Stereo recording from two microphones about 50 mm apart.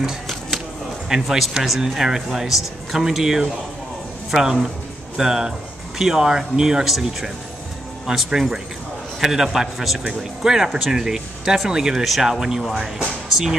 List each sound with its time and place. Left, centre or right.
1.1 s speech: centre